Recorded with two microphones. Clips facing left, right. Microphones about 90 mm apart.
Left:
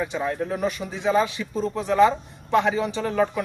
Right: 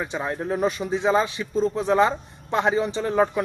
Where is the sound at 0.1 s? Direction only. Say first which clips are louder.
Even; 25° right (ahead or behind).